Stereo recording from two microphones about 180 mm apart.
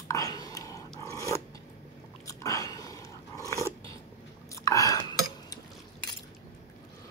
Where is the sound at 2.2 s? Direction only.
20° left (ahead or behind).